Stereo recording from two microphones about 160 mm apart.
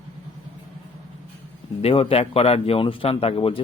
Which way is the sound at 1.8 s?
40° left (ahead or behind).